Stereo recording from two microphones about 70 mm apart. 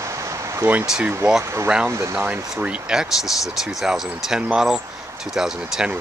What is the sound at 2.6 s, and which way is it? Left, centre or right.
Speech, centre.